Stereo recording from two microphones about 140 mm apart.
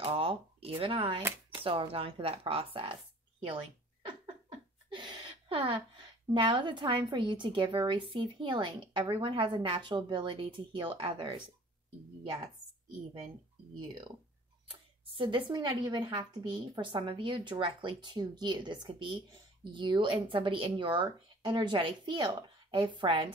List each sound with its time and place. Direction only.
0.0 s speech: 40° right (ahead or behind)
13.7 s speech: 30° right (ahead or behind)